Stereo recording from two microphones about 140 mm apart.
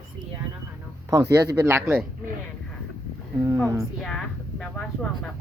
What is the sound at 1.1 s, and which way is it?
Speech, 20° right (ahead or behind).